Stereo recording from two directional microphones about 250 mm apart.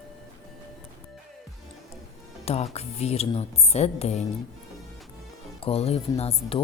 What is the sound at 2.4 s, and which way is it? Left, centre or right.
Speech, left.